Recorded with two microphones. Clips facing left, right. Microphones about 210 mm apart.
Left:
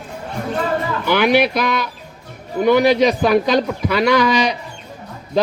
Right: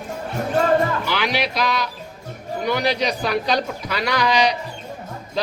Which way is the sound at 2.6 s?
50° left (ahead or behind).